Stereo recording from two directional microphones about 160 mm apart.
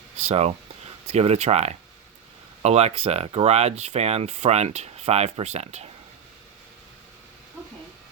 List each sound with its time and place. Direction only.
0.2 s speech: 45° right (ahead or behind)